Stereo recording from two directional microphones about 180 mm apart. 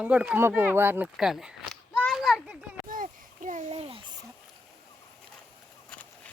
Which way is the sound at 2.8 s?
50° right (ahead or behind).